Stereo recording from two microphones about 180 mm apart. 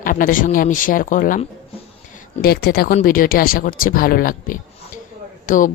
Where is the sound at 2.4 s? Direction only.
60° left (ahead or behind).